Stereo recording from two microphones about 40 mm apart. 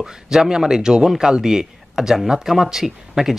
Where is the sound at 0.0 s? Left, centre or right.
Centre.